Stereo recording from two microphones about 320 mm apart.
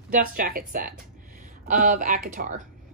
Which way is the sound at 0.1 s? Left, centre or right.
Right.